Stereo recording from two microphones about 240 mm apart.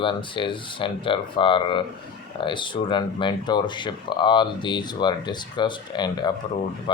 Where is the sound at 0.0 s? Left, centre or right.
Centre.